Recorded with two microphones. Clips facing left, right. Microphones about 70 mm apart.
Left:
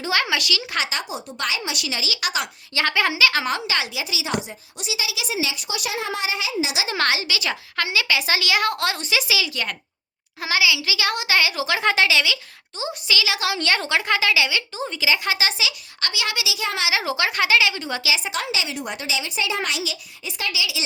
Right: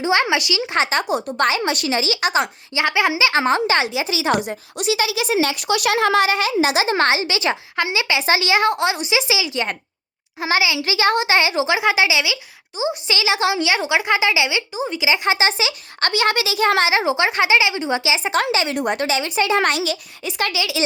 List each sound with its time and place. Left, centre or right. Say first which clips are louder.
0.0 s speech: right 5 dB; right
0.9 s a child's voice: right 9 dB; right
2.7 s speech: right 3 dB; centre
13.6 s speech: right 3 dB; centre; by 16.9 s right
16.9 s speech: right 5 dB; right
18.3 s a child's voice: right 7 dB; right